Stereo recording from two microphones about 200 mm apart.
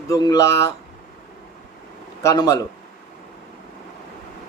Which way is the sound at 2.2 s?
15° left (ahead or behind).